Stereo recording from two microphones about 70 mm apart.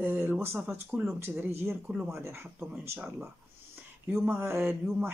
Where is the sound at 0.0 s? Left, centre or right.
Right.